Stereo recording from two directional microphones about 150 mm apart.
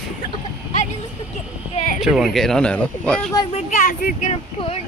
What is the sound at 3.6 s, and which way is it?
Speech, 55° left (ahead or behind).